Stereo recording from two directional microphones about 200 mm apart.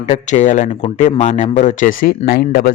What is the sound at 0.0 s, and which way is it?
Speech, 35° left (ahead or behind).